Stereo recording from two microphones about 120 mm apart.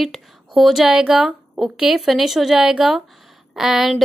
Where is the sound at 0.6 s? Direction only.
5° right (ahead or behind).